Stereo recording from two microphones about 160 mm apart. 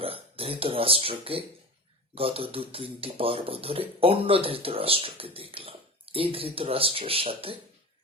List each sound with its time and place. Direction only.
0.0 s speech: 35° right (ahead or behind)